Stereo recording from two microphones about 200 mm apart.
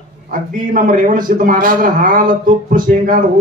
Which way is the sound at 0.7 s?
40° right (ahead or behind).